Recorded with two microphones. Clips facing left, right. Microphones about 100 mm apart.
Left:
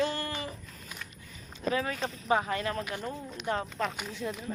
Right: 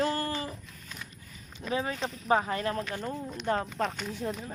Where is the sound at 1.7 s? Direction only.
25° right (ahead or behind).